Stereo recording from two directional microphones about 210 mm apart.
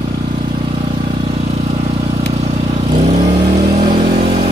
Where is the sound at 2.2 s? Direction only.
30° right (ahead or behind).